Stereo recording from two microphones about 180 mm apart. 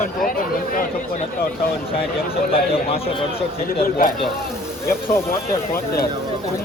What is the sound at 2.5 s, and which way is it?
Speech, 30° left (ahead or behind).